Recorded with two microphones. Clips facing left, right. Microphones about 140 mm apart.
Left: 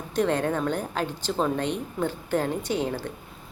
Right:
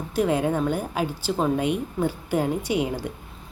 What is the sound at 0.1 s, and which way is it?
A woman's voice, 5° right (ahead or behind).